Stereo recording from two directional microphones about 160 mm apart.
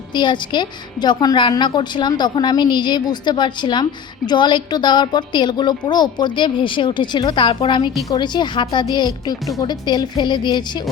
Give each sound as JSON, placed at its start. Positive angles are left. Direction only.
{"t": 0.1, "sound": "a woman's voice", "side_deg": 30}